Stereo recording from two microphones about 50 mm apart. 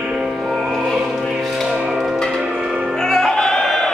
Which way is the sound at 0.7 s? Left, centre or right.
Centre.